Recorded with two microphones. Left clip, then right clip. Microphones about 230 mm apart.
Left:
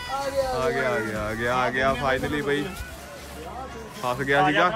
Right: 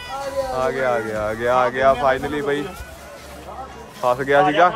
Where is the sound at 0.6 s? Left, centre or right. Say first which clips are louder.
Right 4 dB; right.